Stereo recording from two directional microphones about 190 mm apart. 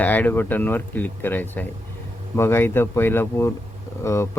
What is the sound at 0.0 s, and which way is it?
Speech, 10° left (ahead or behind).